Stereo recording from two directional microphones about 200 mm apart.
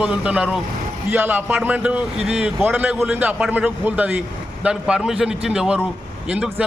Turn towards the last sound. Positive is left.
turn(degrees=-5)  # may be behind; listen again after turning